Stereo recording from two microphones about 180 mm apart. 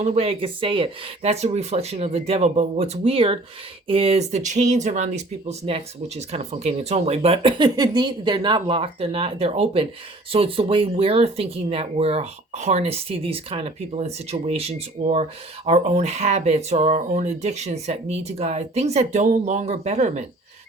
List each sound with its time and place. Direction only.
0.0 s speech: 35° right (ahead or behind)